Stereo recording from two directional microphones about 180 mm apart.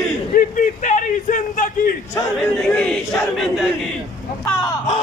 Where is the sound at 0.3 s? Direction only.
45° left (ahead or behind).